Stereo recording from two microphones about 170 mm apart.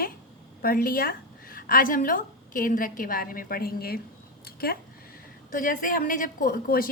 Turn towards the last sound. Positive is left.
turn(degrees=60)  # may be behind; listen again after turning